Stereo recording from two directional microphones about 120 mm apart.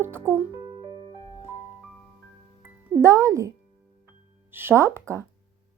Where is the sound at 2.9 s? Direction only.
25° right (ahead or behind).